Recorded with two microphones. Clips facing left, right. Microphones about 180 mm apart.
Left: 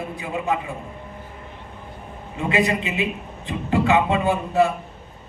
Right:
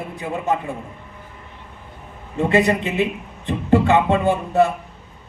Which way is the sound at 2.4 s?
55° right (ahead or behind).